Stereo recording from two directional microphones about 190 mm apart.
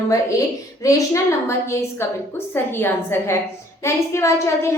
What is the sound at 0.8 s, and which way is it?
A woman's voice, 15° left (ahead or behind).